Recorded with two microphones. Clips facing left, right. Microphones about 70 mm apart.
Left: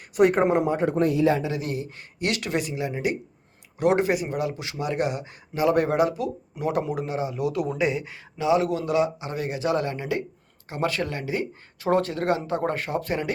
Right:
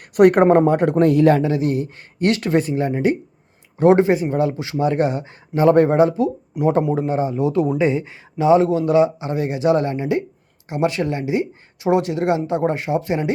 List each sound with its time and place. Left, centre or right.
0.1 s a man's voice: right
1.4 s speech: right